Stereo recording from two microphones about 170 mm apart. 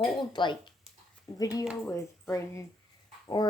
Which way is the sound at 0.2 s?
25° left (ahead or behind).